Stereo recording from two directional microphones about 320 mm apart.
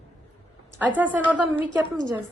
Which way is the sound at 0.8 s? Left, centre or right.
Centre.